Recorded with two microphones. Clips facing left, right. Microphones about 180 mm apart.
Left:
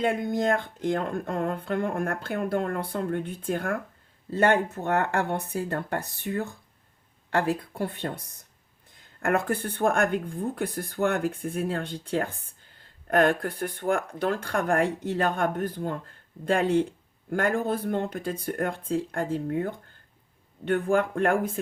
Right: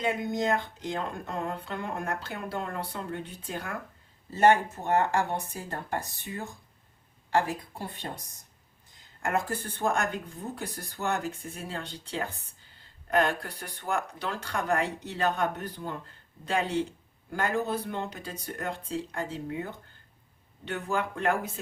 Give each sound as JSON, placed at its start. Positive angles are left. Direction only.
{"t": 0.0, "sound": "a woman's voice", "side_deg": 55}